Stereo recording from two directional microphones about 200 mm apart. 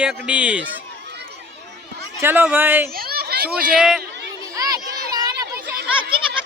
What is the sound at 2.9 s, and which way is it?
Children playing, 50° right (ahead or behind).